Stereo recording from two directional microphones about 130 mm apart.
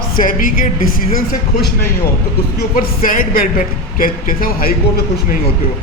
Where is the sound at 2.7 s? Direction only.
90° left.